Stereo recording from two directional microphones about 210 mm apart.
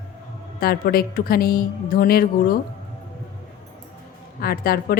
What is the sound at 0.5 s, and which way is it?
Speech, 45° left (ahead or behind).